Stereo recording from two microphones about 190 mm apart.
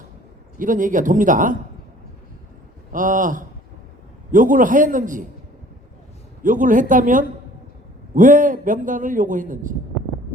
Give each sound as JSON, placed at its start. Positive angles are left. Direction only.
{"t": 0.6, "sound": "a man's voice", "side_deg": -45}
{"t": 2.9, "sound": "a man's voice", "side_deg": -45}
{"t": 6.4, "sound": "a man's voice", "side_deg": -45}